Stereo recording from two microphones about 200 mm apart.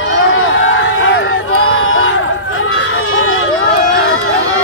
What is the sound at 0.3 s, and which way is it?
Crowd, 80° left.